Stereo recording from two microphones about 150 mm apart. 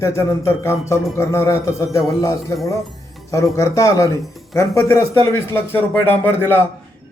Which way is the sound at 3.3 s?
20° left (ahead or behind).